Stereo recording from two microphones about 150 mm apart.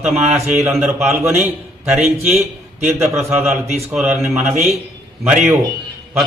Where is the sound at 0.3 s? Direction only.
15° right (ahead or behind).